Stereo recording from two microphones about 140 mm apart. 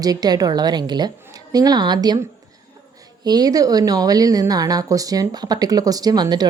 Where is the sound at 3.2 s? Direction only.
30° right (ahead or behind).